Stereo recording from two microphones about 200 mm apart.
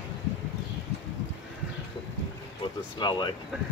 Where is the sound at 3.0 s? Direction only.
20° left (ahead or behind).